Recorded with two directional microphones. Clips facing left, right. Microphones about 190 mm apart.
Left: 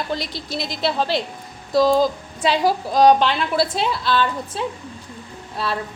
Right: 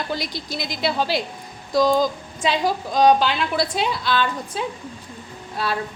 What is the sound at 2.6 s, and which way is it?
Speech, 35° left (ahead or behind).